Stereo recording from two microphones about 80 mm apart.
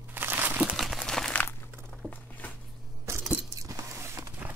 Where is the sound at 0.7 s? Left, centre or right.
Centre.